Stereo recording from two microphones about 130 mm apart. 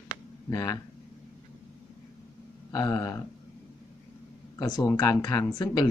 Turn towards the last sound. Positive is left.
turn(degrees=30)  # may be behind; listen again after turning